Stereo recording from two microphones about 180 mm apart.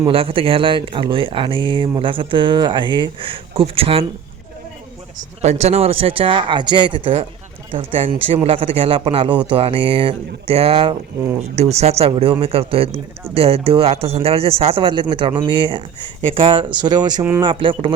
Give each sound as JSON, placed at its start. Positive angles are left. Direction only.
{"t": 0.0, "sound": "speech", "side_deg": -30}
{"t": 5.4, "sound": "speech", "side_deg": -40}